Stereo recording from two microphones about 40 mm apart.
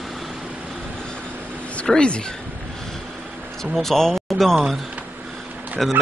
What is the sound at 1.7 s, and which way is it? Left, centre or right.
Speech, left.